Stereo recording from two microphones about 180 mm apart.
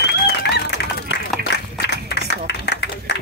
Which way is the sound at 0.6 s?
75° left (ahead or behind).